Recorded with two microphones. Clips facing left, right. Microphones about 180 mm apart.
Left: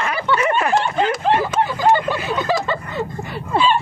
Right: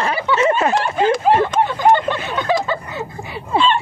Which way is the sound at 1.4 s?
5° left (ahead or behind).